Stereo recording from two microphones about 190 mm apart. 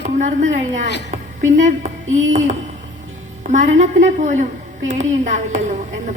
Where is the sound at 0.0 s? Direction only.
40° right (ahead or behind).